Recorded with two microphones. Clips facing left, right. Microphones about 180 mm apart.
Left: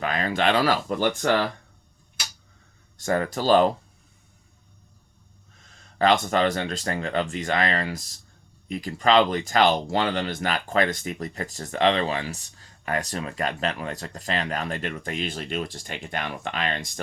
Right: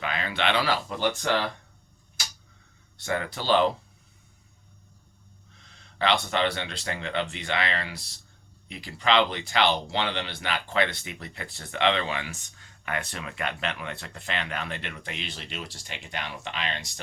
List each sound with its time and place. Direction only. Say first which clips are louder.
0.0 s speech: left 5 dB; 40° left (ahead or behind)
3.0 s speech: left 6 dB; 45° left (ahead or behind)
5.6 s speech: left 6 dB; 45° left (ahead or behind)